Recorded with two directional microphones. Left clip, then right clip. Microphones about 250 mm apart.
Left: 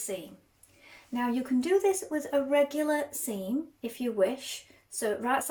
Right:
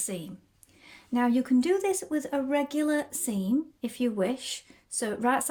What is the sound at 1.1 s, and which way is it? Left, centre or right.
A woman's voice, right.